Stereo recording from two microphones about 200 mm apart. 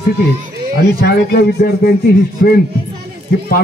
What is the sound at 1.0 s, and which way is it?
Speech, 55° left (ahead or behind).